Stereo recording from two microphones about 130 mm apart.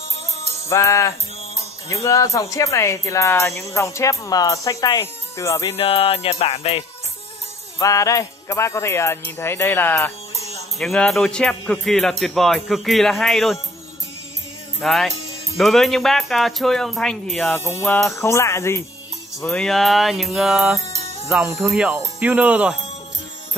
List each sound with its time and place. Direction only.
0.7 s speech: 20° left (ahead or behind)
5.7 s music: 45° left (ahead or behind)
7.8 s speech: 25° left (ahead or behind)
10.3 s music: 55° left (ahead or behind)
10.8 s speech: 5° left (ahead or behind)
14.8 s speech: centre (ahead or behind)
17.6 s speech: 20° left (ahead or behind)
19.4 s speech: 5° left (ahead or behind); by 22.8 s 10° right (ahead or behind)